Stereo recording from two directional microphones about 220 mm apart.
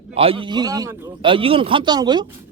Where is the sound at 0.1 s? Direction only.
25° right (ahead or behind).